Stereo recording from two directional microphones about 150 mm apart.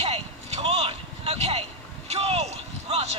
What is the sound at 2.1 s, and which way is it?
Speech, 45° right (ahead or behind).